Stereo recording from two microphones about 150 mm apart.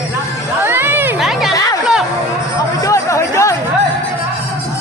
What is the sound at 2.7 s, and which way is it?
Chatter, 20° left (ahead or behind).